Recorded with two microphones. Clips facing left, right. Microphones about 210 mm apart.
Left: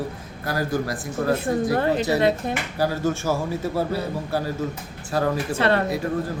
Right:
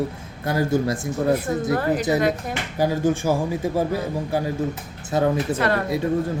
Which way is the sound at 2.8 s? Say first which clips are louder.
Right 4 dB; 15° right (ahead or behind).